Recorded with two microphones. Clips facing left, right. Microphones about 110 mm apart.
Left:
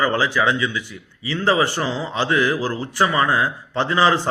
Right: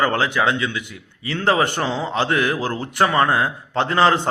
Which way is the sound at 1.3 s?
55° right (ahead or behind).